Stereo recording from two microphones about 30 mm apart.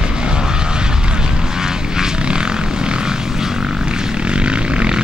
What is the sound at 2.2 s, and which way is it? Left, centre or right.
Vehicle, right.